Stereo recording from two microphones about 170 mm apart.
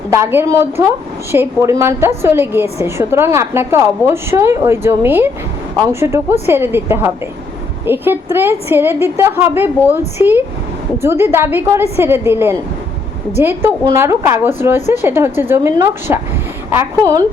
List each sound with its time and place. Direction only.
0.1 s a woman's voice: 15° right (ahead or behind)